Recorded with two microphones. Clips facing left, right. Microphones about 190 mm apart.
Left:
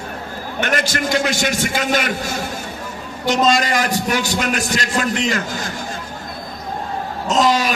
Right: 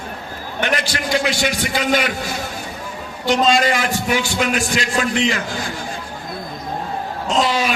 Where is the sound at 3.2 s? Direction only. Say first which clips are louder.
Right 1 dB; 45° left (ahead or behind).